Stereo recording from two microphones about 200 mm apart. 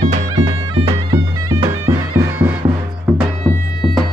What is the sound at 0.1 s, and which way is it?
Bagpipes, 30° right (ahead or behind).